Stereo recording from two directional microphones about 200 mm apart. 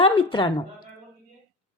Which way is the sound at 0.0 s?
25° left (ahead or behind).